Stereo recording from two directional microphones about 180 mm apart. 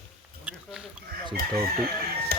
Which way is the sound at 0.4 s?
5° right (ahead or behind).